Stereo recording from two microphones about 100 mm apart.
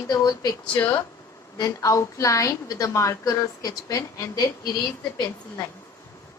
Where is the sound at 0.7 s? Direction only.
25° left (ahead or behind).